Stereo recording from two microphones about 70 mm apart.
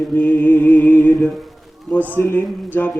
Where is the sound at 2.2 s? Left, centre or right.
Left.